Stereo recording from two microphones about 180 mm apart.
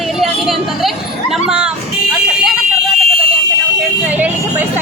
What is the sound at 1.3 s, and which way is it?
Children playing, 5° right (ahead or behind).